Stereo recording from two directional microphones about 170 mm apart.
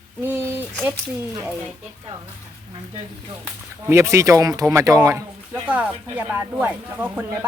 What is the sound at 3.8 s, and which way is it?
Speech, 15° right (ahead or behind).